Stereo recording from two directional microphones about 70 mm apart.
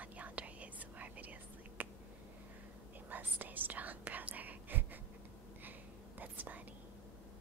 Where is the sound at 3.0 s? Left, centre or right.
Right.